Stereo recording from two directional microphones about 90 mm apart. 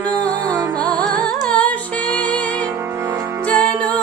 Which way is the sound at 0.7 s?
10° left (ahead or behind).